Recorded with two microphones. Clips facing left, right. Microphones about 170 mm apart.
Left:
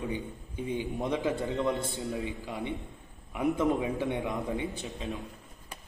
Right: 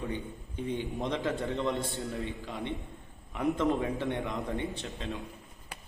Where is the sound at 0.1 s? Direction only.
15° left (ahead or behind).